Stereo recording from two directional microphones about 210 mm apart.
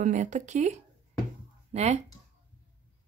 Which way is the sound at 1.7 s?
30° right (ahead or behind).